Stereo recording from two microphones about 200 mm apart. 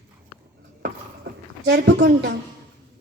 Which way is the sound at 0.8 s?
55° right (ahead or behind).